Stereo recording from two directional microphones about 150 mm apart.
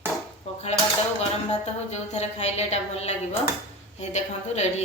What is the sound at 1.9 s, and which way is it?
A woman's voice, 45° left (ahead or behind).